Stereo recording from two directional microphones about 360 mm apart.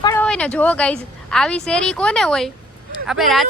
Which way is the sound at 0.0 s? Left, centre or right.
Centre.